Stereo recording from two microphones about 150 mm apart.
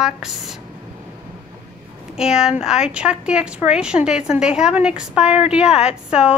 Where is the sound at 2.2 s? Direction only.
5° right (ahead or behind).